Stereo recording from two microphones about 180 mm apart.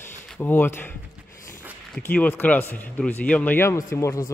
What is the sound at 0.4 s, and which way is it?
Speech, 10° left (ahead or behind).